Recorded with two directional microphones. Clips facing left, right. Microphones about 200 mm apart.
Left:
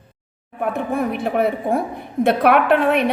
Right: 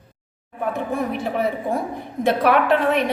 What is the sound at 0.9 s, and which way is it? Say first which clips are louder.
A woman's voice: left 5 dB; 60° left (ahead or behind).